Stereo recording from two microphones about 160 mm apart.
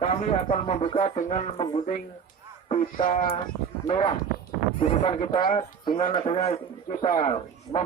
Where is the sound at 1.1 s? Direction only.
45° left (ahead or behind).